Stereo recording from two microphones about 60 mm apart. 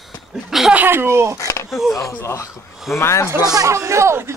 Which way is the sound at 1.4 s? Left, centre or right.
Left.